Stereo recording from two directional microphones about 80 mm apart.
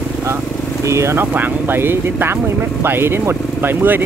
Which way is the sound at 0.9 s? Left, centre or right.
Right.